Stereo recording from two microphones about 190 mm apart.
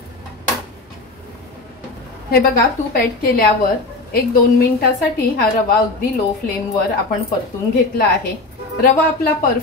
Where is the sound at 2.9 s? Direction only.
50° left (ahead or behind).